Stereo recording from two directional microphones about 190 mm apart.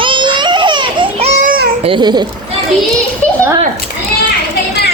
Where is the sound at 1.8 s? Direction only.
25° right (ahead or behind).